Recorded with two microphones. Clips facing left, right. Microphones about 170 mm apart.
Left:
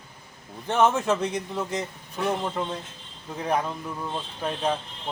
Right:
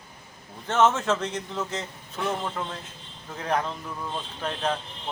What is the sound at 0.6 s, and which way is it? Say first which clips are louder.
Speech: even; 15° left (ahead or behind).